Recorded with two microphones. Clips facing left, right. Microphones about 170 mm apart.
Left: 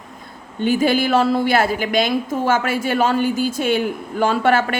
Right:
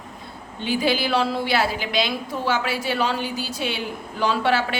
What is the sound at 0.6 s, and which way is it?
A woman's voice, 50° left (ahead or behind).